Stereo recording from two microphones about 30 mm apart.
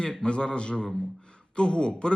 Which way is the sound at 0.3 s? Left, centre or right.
Left.